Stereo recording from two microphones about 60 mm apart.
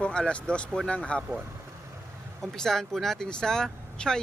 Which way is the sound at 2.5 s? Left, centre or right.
Centre.